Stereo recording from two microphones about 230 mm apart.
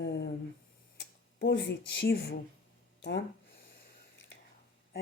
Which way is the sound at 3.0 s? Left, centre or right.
Left.